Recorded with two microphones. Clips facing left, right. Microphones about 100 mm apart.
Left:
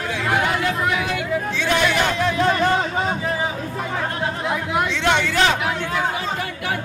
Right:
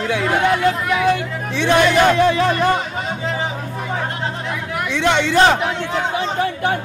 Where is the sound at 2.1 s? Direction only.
75° right (ahead or behind).